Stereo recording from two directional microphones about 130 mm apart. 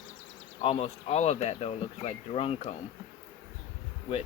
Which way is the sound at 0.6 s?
50° left (ahead or behind).